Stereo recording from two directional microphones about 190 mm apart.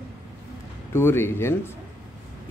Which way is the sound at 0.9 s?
10° left (ahead or behind).